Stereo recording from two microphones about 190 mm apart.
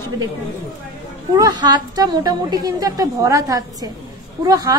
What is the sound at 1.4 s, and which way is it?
A woman's voice, 25° right (ahead or behind).